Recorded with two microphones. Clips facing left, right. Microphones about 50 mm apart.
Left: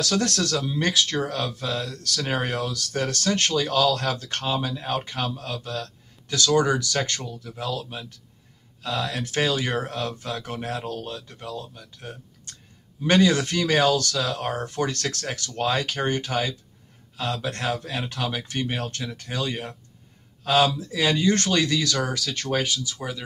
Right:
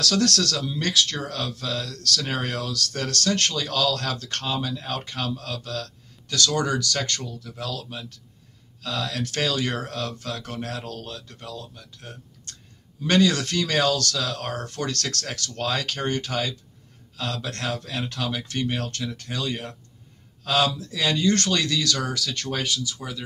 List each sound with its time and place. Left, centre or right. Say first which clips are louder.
0.0 s speech: right 1 dB; left